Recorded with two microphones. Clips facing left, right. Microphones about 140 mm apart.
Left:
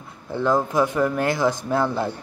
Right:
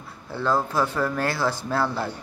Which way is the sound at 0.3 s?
15° left (ahead or behind).